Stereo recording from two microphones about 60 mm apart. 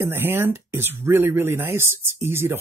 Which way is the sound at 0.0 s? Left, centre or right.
Right.